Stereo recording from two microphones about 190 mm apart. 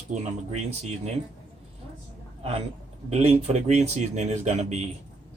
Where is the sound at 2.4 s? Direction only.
30° right (ahead or behind).